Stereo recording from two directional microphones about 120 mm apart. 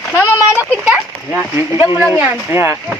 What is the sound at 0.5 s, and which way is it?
Speech, 15° right (ahead or behind).